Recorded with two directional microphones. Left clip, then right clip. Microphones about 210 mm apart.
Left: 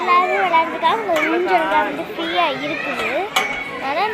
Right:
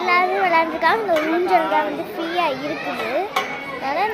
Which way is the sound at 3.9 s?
5° right (ahead or behind).